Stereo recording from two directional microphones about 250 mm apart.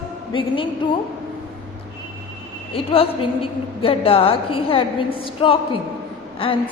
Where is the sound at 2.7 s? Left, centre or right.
Left.